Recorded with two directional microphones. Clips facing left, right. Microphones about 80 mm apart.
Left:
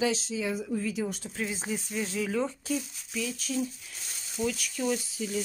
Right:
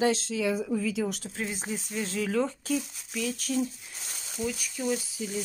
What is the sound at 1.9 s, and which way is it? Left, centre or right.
Speech, right.